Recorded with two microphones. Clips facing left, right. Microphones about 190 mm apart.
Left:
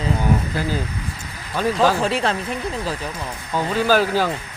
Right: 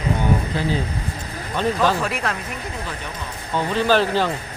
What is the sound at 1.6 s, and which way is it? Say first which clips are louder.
Speech: left 1 dB; 5° left (ahead or behind).